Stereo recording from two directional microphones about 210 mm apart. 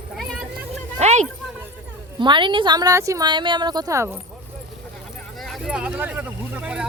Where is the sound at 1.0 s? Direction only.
35° right (ahead or behind).